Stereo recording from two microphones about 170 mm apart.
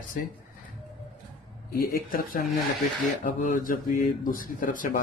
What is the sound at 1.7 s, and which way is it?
Speech, 60° left (ahead or behind).